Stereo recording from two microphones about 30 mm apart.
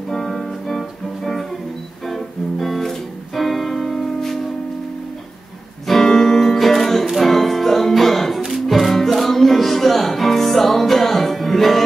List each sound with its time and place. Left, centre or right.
0.1 s music: centre
6.0 s music: centre
6.6 s music: centre